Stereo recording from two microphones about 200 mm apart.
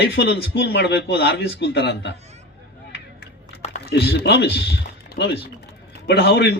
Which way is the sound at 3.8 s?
55° left (ahead or behind).